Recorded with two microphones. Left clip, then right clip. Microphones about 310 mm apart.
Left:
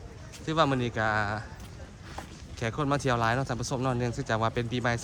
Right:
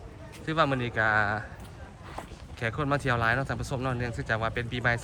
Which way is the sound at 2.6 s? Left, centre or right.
Centre.